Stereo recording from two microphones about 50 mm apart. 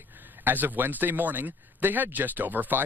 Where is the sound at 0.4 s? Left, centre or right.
Right.